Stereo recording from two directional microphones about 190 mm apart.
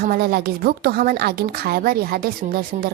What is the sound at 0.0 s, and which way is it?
Speech, 55° right (ahead or behind).